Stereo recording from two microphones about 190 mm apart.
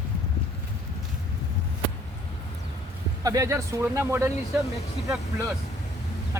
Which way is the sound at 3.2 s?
15° right (ahead or behind).